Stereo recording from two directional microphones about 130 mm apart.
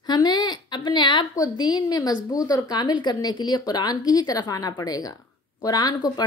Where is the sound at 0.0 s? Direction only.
30° left (ahead or behind).